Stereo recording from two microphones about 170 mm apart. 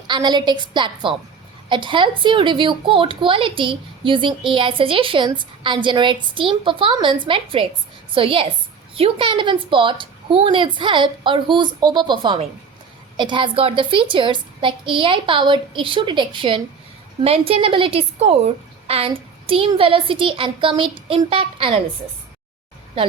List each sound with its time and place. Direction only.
0.1 s a woman's voice: 25° right (ahead or behind)